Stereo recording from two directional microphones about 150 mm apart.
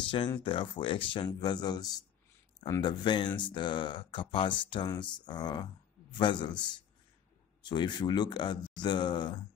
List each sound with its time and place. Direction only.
0.4 s speech: 35° left (ahead or behind)